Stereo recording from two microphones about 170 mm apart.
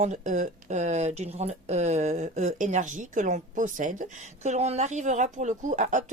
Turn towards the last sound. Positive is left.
turn(degrees=-45)  # may be behind; listen again after turning